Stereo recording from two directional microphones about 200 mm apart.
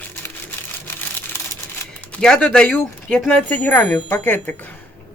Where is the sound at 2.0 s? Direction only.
5° left (ahead or behind).